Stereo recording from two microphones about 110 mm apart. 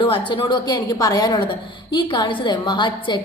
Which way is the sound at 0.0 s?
50° left (ahead or behind).